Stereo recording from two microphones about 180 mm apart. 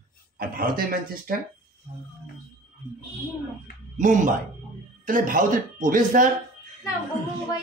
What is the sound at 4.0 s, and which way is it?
Speech, 45° right (ahead or behind).